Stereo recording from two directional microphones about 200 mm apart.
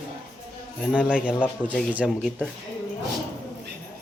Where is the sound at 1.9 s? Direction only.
5° right (ahead or behind).